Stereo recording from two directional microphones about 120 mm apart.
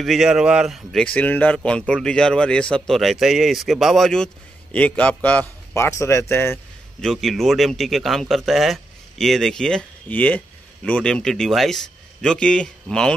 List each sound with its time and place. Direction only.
0.0 s a man's voice: centre (ahead or behind)
1.0 s speech: 15° left (ahead or behind)
5.8 s speech: 25° left (ahead or behind)
7.0 s a man's voice: 5° left (ahead or behind)